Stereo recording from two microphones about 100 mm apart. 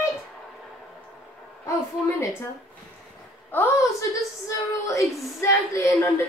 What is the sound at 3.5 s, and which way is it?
Speech, 15° left (ahead or behind).